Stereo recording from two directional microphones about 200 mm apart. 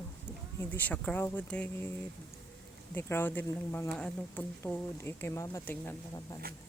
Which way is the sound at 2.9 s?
10° left (ahead or behind).